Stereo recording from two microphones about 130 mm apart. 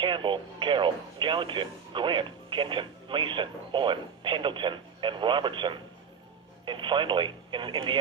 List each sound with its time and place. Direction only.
0.0 s speech: 40° right (ahead or behind)